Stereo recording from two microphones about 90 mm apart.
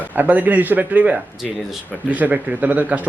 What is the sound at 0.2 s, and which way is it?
A man's voice, 20° right (ahead or behind).